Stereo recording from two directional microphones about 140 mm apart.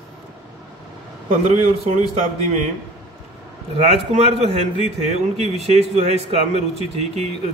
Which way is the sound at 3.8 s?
50° right (ahead or behind).